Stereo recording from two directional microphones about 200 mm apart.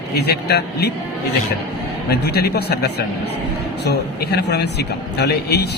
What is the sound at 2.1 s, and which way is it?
A man's voice, 55° left (ahead or behind).